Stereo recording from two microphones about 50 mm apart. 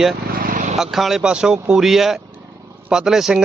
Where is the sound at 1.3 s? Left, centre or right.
Centre.